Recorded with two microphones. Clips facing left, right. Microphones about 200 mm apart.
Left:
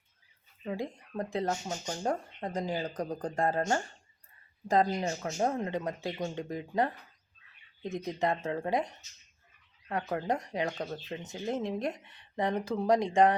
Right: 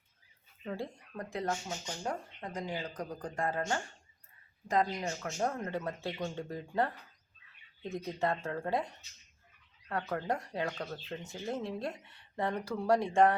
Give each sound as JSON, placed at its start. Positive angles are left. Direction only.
{"t": 0.6, "sound": "speech", "side_deg": 15}
{"t": 1.1, "sound": "speech", "side_deg": 30}
{"t": 1.6, "sound": "speech", "side_deg": 40}
{"t": 5.4, "sound": "speech", "side_deg": 20}
{"t": 9.9, "sound": "speech", "side_deg": 15}